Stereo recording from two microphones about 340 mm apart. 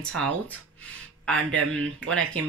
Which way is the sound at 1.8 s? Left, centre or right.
Right.